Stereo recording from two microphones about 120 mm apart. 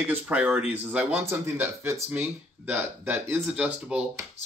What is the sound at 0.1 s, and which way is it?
A man's voice, 10° right (ahead or behind).